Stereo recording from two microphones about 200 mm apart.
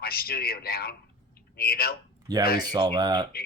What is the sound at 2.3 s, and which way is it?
Speech, 20° right (ahead or behind).